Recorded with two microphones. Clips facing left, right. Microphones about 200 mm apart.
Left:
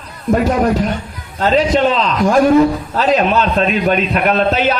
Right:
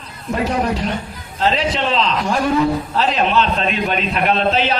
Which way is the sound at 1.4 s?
45° left (ahead or behind).